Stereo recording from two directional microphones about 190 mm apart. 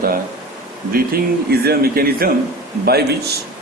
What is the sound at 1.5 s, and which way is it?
A man's voice, 55° right (ahead or behind).